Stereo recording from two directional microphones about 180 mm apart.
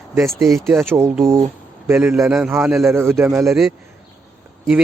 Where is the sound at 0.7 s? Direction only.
15° right (ahead or behind).